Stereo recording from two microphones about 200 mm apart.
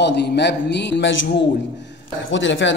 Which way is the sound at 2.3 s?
70° left (ahead or behind).